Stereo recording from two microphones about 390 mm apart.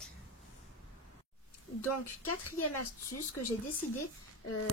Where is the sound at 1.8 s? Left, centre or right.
Left.